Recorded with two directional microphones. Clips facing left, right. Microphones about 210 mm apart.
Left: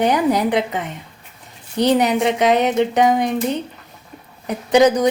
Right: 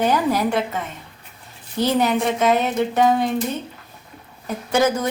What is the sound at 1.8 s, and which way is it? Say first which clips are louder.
A woman's voice: left 3 dB; 15° left (ahead or behind).